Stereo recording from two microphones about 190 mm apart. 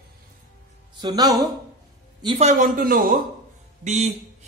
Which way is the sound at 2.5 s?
50° right (ahead or behind).